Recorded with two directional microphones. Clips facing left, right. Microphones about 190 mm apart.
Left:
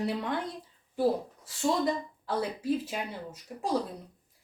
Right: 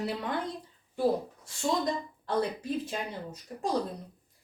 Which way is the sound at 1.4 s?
5° left (ahead or behind).